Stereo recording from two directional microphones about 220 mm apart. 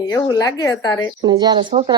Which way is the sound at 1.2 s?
20° right (ahead or behind).